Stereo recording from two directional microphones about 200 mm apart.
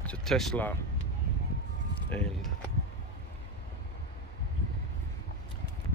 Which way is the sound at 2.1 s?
5° left (ahead or behind).